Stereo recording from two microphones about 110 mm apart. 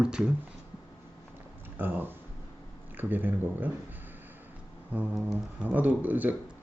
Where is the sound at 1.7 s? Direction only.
15° right (ahead or behind).